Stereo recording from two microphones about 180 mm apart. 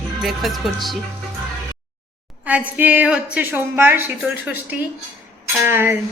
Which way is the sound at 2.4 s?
10° right (ahead or behind).